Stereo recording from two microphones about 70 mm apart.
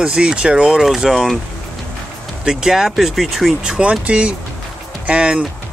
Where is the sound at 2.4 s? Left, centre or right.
Centre.